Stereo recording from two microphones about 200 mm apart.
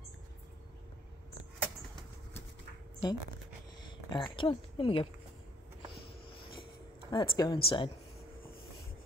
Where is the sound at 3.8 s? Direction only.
20° left (ahead or behind).